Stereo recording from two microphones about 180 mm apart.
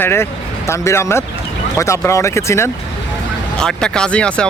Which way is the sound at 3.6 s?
5° left (ahead or behind).